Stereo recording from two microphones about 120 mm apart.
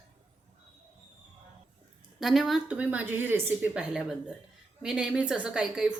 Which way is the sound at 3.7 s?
5° right (ahead or behind).